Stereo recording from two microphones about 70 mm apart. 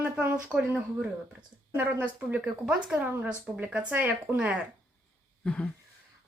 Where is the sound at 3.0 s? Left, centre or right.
Right.